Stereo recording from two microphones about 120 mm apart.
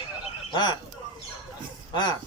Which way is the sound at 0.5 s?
35° left (ahead or behind).